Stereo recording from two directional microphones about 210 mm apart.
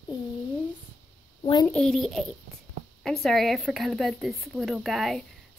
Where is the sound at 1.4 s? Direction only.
20° left (ahead or behind).